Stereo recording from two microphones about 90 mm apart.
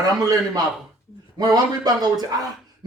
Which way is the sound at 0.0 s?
45° right (ahead or behind).